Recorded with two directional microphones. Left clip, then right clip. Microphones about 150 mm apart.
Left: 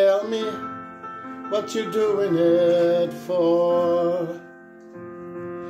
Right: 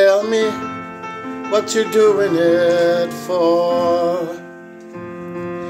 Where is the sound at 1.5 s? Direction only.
10° left (ahead or behind).